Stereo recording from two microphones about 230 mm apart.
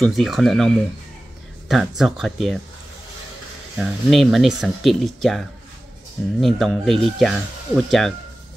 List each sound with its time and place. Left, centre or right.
0.0 s speech: centre
3.7 s speech: centre